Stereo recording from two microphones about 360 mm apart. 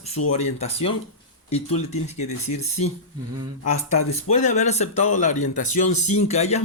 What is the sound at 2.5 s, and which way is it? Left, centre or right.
Speech, left.